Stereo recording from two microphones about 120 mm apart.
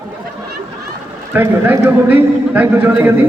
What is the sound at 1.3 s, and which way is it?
A man's voice, 15° right (ahead or behind).